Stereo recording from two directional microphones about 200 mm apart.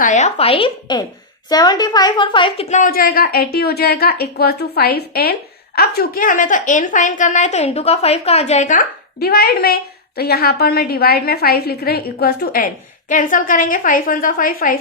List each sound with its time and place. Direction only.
0.0 s a woman's voice: 35° left (ahead or behind)